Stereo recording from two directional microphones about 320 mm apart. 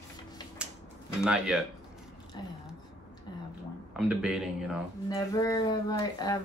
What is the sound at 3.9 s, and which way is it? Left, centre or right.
Speech, centre.